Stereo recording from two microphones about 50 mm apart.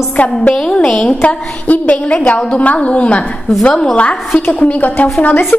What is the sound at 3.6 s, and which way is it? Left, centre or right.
Speech, centre.